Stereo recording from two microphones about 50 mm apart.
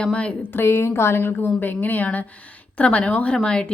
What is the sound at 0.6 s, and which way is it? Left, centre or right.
A woman's voice, left.